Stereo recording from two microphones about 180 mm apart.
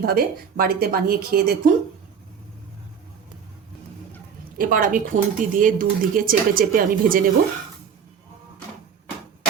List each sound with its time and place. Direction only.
0.0 s a woman's voice: 55° right (ahead or behind)
4.5 s speech: 50° right (ahead or behind)